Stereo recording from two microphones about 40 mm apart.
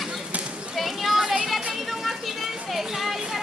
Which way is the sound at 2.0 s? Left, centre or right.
Centre.